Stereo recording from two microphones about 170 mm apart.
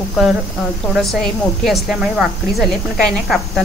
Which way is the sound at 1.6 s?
Centre (ahead or behind).